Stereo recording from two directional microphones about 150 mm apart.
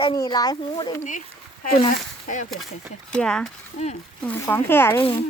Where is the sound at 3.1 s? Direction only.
5° left (ahead or behind).